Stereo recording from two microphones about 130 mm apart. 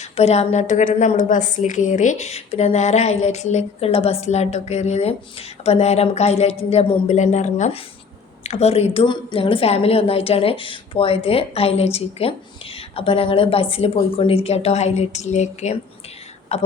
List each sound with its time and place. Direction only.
0.0 s a woman's voice: 55° left (ahead or behind)
7.1 s a woman's voice: 65° left (ahead or behind)